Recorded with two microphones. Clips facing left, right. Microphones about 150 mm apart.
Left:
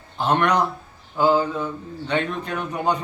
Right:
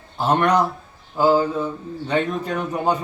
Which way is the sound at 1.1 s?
5° right (ahead or behind).